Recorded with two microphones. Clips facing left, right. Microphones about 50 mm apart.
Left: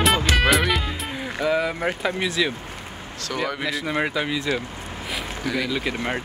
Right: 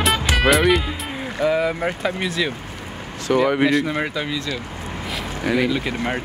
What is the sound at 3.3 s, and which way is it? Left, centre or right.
Speech, right.